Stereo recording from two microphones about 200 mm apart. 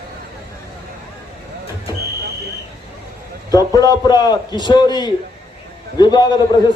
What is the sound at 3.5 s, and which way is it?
A man's voice, 20° left (ahead or behind).